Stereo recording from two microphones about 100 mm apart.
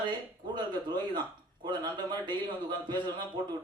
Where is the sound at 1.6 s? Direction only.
50° right (ahead or behind).